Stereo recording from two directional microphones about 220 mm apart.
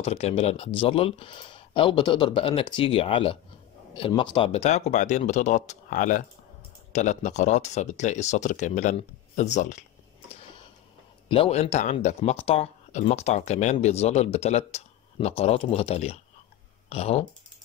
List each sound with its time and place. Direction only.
0.0 s speech: 25° left (ahead or behind)
11.2 s speech: 25° left (ahead or behind)